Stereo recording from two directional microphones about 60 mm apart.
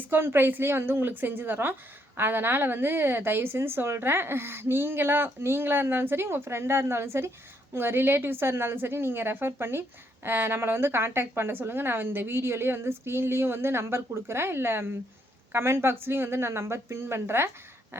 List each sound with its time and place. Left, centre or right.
0.0 s a woman's voice: right